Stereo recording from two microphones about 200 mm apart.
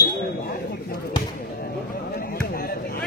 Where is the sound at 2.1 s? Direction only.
50° left (ahead or behind).